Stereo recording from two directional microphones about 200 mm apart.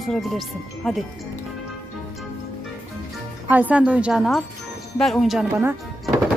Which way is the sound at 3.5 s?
10° right (ahead or behind).